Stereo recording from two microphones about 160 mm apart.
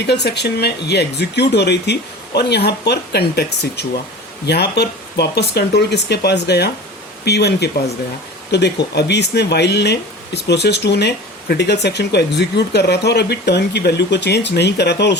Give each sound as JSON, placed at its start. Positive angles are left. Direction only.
{"t": 0.1, "sound": "speech", "side_deg": 90}